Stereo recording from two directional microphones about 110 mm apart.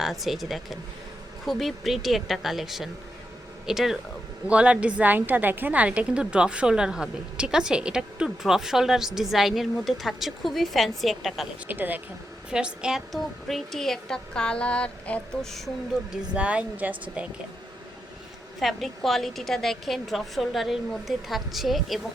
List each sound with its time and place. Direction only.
0.0 s a woman's voice: centre (ahead or behind)
11.7 s a woman's voice: 15° right (ahead or behind); by 15.4 s 10° left (ahead or behind)
16.3 s a woman's voice: 10° right (ahead or behind)
18.6 s a woman's voice: centre (ahead or behind)